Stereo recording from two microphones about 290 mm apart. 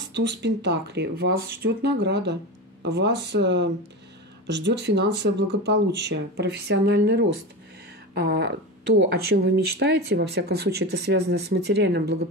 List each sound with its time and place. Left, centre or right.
0.1 s speech: right